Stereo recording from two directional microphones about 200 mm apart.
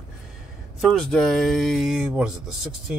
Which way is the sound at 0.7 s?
Centre (ahead or behind).